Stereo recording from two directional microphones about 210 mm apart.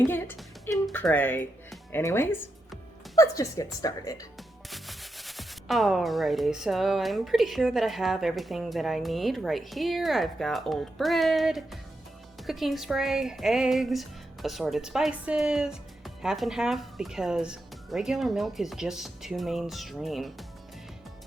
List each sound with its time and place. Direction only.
0.7 s music: 10° left (ahead or behind)
1.0 s speech: 10° left (ahead or behind)
4.7 s speech: centre (ahead or behind)